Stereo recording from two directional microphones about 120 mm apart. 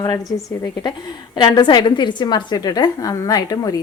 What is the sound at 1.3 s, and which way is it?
A woman's voice, 35° left (ahead or behind).